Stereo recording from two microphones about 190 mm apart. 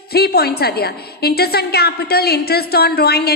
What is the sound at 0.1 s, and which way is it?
A woman's voice, 55° left (ahead or behind).